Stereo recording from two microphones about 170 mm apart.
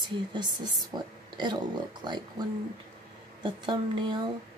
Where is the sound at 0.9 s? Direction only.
25° right (ahead or behind).